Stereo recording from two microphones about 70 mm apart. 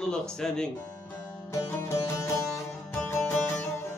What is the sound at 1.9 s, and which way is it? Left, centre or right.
Music, left.